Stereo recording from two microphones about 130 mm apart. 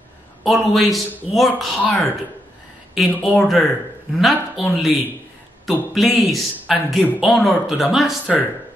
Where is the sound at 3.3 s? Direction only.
10° left (ahead or behind).